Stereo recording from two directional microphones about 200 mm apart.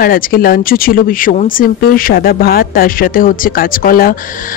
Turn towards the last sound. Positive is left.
turn(degrees=45)  # may be behind; listen again after turning